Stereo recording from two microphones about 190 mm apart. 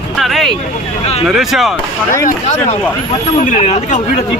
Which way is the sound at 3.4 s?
40° left (ahead or behind).